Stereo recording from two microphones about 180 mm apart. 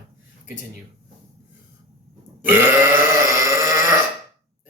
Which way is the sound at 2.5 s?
10° right (ahead or behind).